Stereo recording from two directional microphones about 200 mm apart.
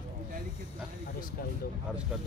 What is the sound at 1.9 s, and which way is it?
Speech, 5° right (ahead or behind).